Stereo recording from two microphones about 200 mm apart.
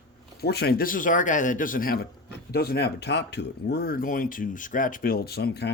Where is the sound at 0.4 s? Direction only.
55° left (ahead or behind).